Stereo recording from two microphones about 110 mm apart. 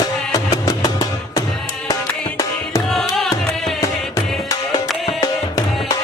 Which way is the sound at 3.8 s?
30° left (ahead or behind).